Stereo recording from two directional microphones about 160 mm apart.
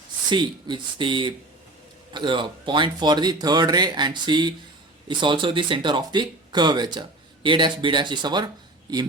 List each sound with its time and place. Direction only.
0.3 s speech: 30° right (ahead or behind)